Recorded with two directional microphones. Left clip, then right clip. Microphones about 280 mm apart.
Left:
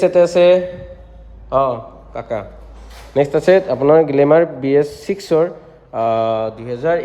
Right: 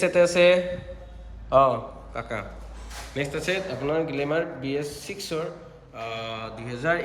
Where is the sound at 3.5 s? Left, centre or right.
Left.